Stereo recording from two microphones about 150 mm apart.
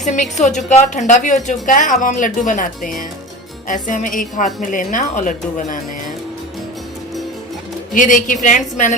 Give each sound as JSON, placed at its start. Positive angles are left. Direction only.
{"t": 0.0, "sound": "a woman's voice", "side_deg": 55}
{"t": 7.9, "sound": "a woman's voice", "side_deg": 60}